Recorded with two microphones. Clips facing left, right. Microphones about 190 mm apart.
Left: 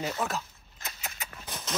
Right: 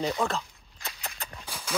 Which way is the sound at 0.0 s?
5° left (ahead or behind).